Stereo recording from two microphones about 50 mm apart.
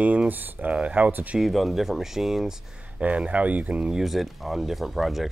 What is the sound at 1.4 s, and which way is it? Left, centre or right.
Speech, centre.